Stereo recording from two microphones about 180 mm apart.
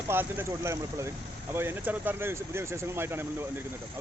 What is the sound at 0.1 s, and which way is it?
Speech, 10° right (ahead or behind).